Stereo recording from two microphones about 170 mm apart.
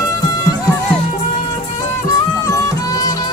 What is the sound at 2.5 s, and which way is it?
Music, 20° left (ahead or behind).